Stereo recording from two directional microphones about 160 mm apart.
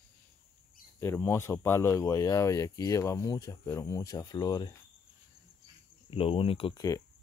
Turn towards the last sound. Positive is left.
turn(degrees=35)  # may be behind; listen again after turning